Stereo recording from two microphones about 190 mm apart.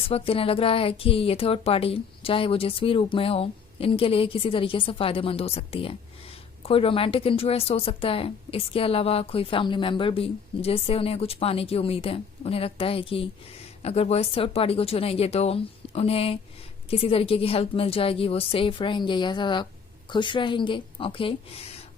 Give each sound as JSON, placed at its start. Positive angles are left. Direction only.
{"t": 0.1, "sound": "a woman's voice", "side_deg": 30}